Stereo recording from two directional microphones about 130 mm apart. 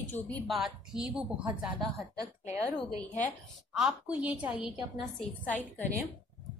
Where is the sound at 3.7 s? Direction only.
5° right (ahead or behind).